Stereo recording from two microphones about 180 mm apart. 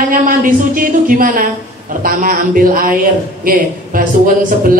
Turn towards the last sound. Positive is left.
turn(degrees=-50)  # may be behind; listen again after turning